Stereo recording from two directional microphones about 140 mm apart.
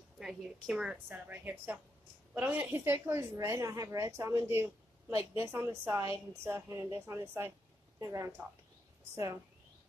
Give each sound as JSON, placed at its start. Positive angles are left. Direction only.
{"t": 0.2, "sound": "a woman's voice", "side_deg": -5}